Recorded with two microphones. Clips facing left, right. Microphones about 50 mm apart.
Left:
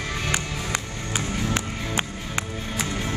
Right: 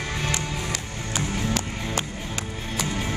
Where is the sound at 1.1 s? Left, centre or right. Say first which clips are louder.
Even; left.